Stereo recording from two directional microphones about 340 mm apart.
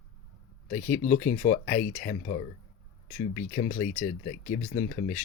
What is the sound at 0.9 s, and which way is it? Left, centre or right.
Speech, left.